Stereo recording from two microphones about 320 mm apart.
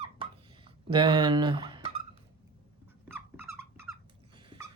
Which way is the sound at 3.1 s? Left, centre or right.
Centre.